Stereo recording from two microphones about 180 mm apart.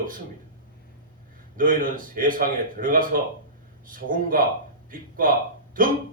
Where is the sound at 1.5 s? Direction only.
50° right (ahead or behind).